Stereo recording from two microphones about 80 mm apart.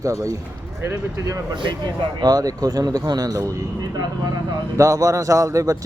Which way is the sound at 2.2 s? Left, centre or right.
Right.